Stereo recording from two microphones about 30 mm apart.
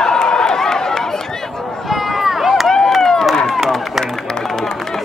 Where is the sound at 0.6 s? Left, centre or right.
Centre.